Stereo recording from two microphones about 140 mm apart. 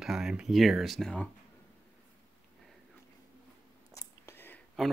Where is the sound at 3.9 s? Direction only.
20° left (ahead or behind).